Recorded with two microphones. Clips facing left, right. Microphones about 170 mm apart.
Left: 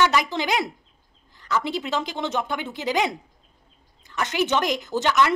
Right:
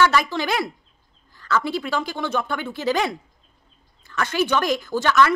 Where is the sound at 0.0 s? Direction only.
20° left (ahead or behind).